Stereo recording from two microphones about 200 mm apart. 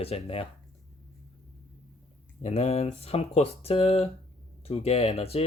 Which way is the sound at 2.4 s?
35° left (ahead or behind).